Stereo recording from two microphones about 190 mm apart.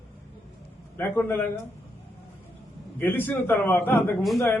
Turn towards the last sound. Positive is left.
turn(degrees=10)  # may be behind; listen again after turning